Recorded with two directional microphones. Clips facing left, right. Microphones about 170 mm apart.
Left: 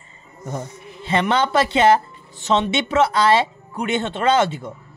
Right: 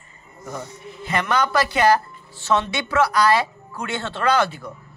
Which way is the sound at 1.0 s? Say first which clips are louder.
Left 3 dB; 25° left (ahead or behind).